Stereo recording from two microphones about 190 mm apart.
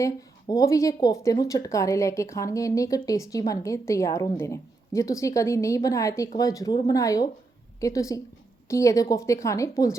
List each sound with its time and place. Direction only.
0.0 s speech: 15° left (ahead or behind)